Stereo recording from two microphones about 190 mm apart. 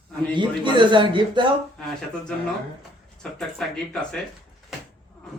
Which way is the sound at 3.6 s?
Centre (ahead or behind).